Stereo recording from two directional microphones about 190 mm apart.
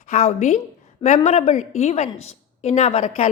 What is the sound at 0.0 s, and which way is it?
A woman's voice, 40° left (ahead or behind).